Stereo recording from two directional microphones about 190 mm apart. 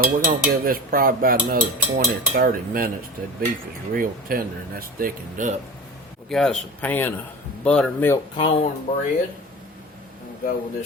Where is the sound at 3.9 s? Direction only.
50° right (ahead or behind).